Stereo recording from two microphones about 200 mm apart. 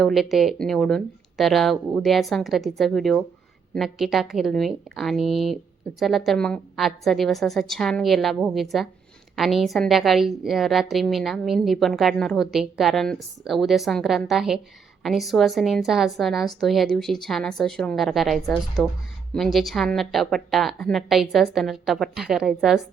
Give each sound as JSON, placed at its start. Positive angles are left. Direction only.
{"t": 0.0, "sound": "a woman's voice", "side_deg": 0}